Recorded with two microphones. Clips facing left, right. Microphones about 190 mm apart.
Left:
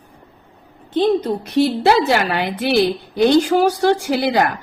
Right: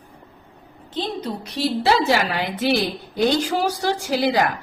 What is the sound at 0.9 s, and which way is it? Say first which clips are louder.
A woman's voice: left 10 dB; 55° left (ahead or behind).